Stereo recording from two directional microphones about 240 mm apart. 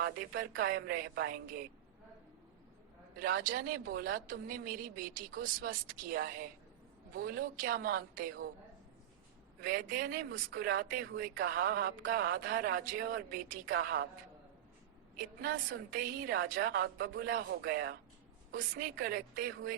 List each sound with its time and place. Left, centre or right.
0.0 s speech: right
3.2 s speech: right
9.6 s speech: right
15.1 s speech: right